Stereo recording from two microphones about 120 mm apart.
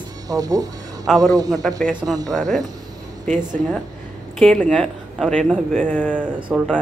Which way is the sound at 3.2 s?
90° right.